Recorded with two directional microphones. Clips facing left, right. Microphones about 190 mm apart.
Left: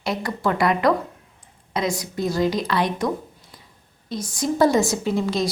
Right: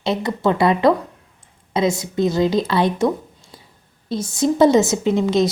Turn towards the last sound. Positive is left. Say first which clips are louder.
# right 6 dB
turn(degrees=-20)  # may be behind; listen again after turning